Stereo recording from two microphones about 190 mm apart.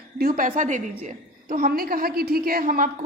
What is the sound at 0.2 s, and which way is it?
A woman's voice, 50° right (ahead or behind).